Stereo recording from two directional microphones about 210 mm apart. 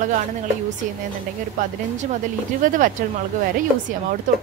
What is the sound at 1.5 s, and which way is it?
Speech, 35° right (ahead or behind).